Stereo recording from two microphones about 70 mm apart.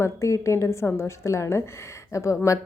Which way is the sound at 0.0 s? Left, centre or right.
Left.